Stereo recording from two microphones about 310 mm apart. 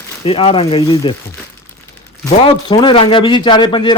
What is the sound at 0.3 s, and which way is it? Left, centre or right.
Speech, centre.